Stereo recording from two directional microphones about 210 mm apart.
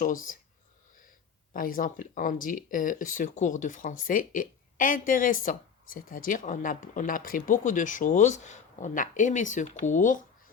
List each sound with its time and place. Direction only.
0.0 s speech: 40° left (ahead or behind)
1.5 s speech: 40° left (ahead or behind)